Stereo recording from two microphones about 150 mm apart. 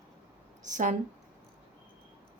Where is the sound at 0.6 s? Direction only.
55° right (ahead or behind).